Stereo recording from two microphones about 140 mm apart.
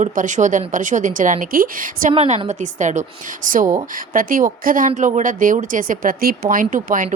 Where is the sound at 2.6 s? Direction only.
60° right (ahead or behind).